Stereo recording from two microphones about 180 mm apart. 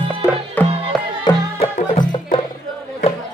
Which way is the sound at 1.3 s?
25° left (ahead or behind).